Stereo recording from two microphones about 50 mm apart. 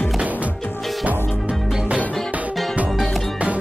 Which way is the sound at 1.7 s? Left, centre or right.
Centre.